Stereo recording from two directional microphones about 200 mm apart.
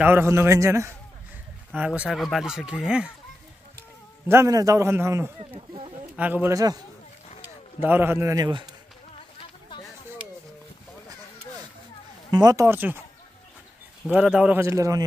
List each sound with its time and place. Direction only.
0.0 s a man's voice: 10° right (ahead or behind)
4.3 s a man's voice: 15° right (ahead or behind)
5.4 s speech: 30° right (ahead or behind)
6.1 s a man's voice: 10° right (ahead or behind)
7.8 s a man's voice: 10° right (ahead or behind)
12.3 s a man's voice: 20° right (ahead or behind)
14.0 s a man's voice: 5° right (ahead or behind)